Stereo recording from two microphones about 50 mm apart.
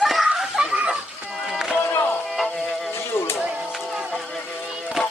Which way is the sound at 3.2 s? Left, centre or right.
Left.